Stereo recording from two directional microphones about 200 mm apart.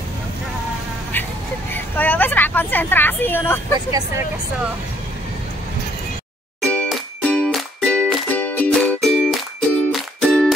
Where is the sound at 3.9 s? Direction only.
15° right (ahead or behind).